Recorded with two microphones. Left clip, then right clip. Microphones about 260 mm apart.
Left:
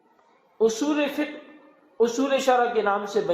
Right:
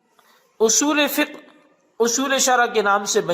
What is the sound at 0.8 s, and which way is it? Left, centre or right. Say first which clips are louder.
A man's voice: right 6 dB; right.